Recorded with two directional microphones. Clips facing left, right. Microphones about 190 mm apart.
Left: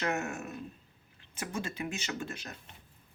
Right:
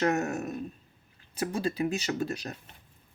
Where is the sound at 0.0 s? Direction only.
40° right (ahead or behind).